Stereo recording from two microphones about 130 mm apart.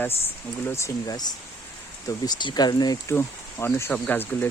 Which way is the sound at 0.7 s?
20° left (ahead or behind).